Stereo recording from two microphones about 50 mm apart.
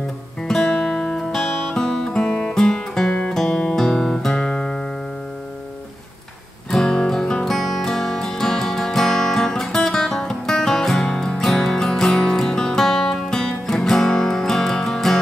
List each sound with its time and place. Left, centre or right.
0.4 s music: centre
6.7 s music: centre
7.5 s music: centre